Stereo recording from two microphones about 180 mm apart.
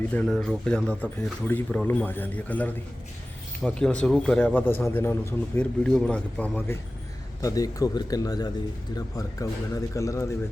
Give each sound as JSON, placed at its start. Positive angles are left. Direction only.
{"t": 0.1, "sound": "speech", "side_deg": 5}
{"t": 7.4, "sound": "speech", "side_deg": 20}